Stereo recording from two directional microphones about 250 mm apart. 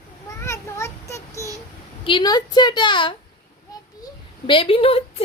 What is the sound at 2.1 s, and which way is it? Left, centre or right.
A woman's voice, centre.